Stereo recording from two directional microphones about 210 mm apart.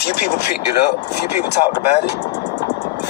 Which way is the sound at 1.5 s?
30° left (ahead or behind).